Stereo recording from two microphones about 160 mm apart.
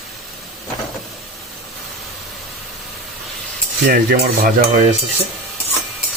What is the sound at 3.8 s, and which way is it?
Speech, 70° right (ahead or behind).